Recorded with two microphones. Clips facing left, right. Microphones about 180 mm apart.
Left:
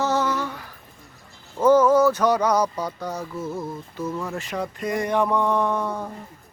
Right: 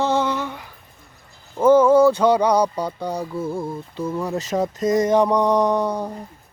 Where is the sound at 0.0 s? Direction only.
25° right (ahead or behind).